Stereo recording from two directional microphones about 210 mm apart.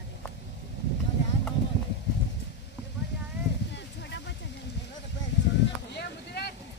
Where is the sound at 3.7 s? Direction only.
55° left (ahead or behind).